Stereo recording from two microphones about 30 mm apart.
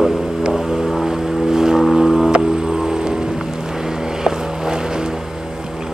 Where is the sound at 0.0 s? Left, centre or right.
Centre.